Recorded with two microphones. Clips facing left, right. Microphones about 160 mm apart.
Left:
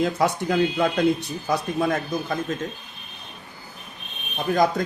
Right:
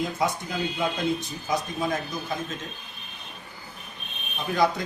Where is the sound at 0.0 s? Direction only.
70° left (ahead or behind).